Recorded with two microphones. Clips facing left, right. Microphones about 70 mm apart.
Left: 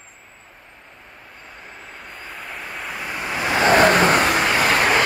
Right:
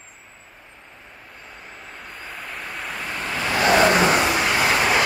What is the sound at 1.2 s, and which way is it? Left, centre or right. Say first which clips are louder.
Vehicle: left 1 dB; centre.